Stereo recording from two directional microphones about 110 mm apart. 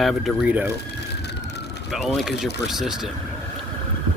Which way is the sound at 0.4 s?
15° right (ahead or behind).